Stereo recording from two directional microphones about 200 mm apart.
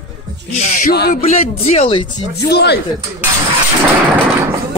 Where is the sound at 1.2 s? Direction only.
30° left (ahead or behind).